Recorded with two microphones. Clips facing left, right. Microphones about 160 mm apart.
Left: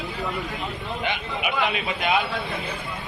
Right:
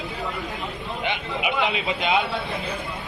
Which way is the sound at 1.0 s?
20° right (ahead or behind).